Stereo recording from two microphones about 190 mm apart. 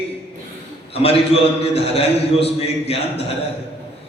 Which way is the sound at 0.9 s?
30° left (ahead or behind).